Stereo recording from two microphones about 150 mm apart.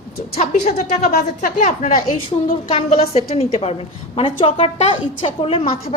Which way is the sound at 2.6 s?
35° left (ahead or behind).